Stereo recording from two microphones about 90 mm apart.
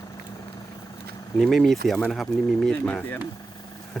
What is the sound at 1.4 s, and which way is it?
Speech, 5° left (ahead or behind).